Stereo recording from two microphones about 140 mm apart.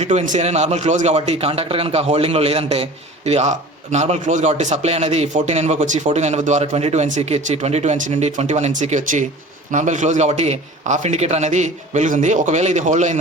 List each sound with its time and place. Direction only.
0.0 s a man's voice: 55° right (ahead or behind)